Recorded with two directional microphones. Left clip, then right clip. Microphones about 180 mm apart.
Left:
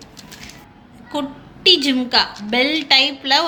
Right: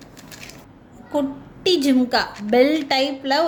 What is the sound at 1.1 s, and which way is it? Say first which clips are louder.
A woman's voice: right 2 dB; 40° right (ahead or behind).